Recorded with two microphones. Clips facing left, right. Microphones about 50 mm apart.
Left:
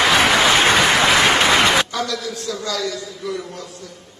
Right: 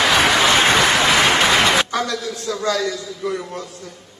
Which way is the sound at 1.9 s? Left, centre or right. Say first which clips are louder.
Right 2 dB; right.